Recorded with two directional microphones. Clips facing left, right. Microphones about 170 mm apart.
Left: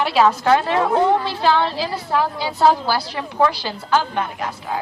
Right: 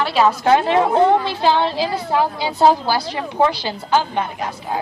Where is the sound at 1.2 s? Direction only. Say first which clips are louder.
Right 1 dB; 20° right (ahead or behind).